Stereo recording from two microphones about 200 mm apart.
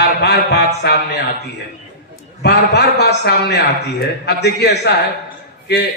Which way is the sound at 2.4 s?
55° left (ahead or behind).